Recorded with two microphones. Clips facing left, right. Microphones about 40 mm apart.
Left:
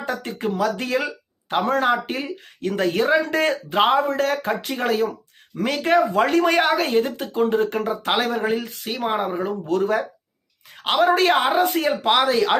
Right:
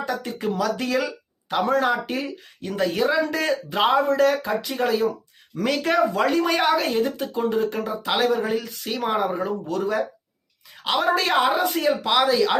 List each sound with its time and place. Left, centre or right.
0.0 s a sound: left
0.3 s speech: left
6.3 s speech: left
9.6 s speech: left